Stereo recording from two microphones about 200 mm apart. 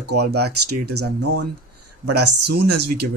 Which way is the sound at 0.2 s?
55° right (ahead or behind).